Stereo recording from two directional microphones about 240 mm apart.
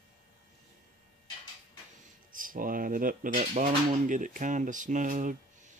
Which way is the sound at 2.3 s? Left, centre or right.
Right.